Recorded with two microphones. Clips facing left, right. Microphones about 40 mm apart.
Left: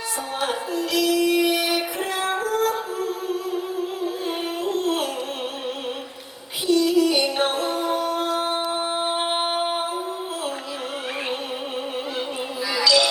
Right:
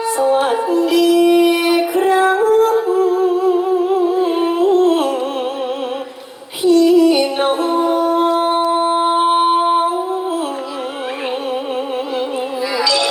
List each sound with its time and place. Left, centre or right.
0.3 s music: right
0.9 s music: right
1.6 s female singing: right
2.4 s music: right
4.0 s humming: right
4.6 s a sound: right
6.6 s music: right
8.4 s a sound: centre
8.9 s singing: centre